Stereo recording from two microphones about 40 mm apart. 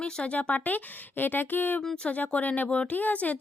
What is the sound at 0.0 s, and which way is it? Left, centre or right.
Speech, left.